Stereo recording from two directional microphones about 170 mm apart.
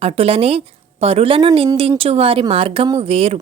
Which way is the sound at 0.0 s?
35° right (ahead or behind).